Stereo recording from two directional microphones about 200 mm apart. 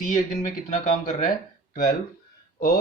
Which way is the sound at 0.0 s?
40° left (ahead or behind).